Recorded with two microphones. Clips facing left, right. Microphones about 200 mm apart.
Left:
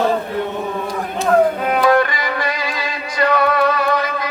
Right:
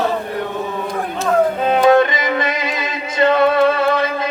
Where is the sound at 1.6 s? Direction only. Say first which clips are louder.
Right 3 dB; 25° right (ahead or behind).